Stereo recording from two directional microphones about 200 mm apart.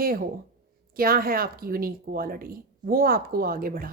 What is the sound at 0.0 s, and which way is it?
A woman's voice, 45° right (ahead or behind).